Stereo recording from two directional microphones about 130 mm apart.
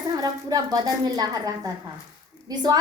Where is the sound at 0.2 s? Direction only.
30° right (ahead or behind).